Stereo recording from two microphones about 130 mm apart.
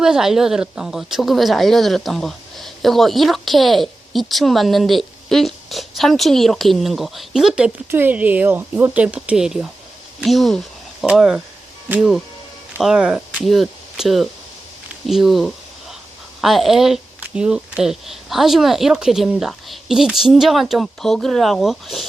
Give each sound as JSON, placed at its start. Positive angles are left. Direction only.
{"t": 0.0, "sound": "speech", "side_deg": -5}
{"t": 7.9, "sound": "speech", "side_deg": -15}
{"t": 15.0, "sound": "a sound", "side_deg": 0}
{"t": 16.4, "sound": "speech", "side_deg": 0}